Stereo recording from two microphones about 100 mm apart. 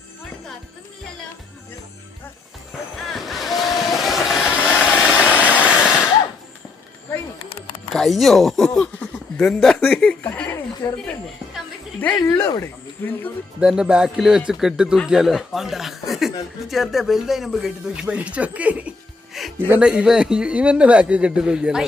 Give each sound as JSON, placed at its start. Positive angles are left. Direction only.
{"t": 3.1, "sound": "vehicle", "side_deg": 0}
{"t": 7.9, "sound": "speech", "side_deg": 0}
{"t": 10.8, "sound": "speech", "side_deg": 45}
{"t": 11.9, "sound": "speech", "side_deg": 20}
{"t": 12.3, "sound": "speech", "side_deg": 30}
{"t": 13.6, "sound": "a man's voice", "side_deg": -10}
{"t": 19.3, "sound": "music", "side_deg": 0}
{"t": 19.6, "sound": "speech", "side_deg": -20}
{"t": 19.9, "sound": "a man's voice", "side_deg": -5}